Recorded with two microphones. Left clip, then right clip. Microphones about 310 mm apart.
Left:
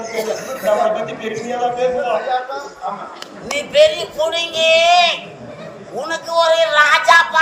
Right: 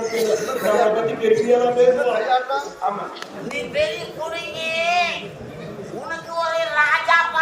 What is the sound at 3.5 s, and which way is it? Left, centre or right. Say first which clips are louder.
A man's voice: left 10 dB; left.